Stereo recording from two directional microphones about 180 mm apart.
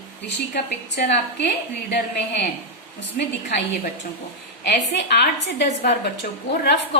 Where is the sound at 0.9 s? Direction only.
70° left (ahead or behind).